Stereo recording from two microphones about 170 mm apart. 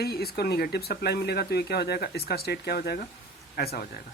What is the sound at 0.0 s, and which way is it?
Speech, 65° left (ahead or behind).